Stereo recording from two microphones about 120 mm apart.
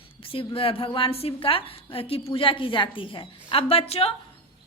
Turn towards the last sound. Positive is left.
turn(degrees=55)  # may be behind; listen again after turning